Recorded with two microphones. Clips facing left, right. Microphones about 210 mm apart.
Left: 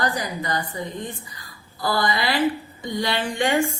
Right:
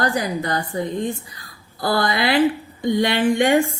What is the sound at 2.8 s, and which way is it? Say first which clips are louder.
Speech: right 7 dB; 60° right (ahead or behind).